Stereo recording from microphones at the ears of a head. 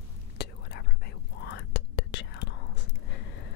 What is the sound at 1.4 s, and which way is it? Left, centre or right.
Whispering, left.